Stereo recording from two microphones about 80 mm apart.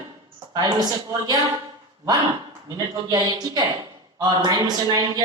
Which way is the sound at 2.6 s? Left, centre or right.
Right.